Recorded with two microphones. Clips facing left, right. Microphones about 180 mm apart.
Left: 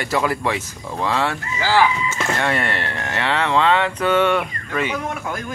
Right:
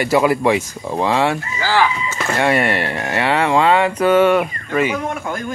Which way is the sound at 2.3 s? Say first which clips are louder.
Right 8 dB; 10° right (ahead or behind).